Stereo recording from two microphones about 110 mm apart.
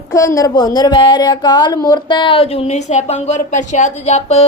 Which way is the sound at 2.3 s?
60° left (ahead or behind).